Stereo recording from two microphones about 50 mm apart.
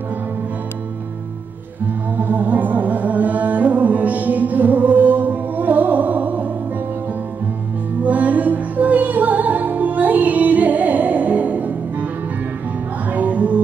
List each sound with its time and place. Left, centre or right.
2.1 s music: right
8.0 s music: right
13.1 s music: right